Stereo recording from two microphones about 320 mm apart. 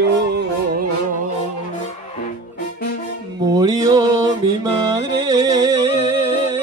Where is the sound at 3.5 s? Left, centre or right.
Centre.